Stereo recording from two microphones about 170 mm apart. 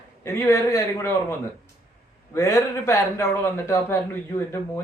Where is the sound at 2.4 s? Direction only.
15° left (ahead or behind).